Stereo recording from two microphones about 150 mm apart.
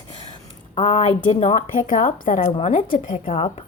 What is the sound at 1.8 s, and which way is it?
Speech, 65° left (ahead or behind).